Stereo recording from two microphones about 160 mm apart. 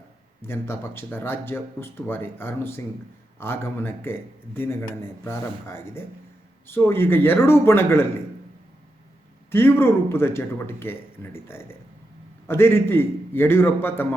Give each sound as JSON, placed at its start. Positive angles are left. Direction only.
{"t": 0.4, "sound": "speech", "side_deg": 15}
{"t": 9.5, "sound": "speech", "side_deg": 15}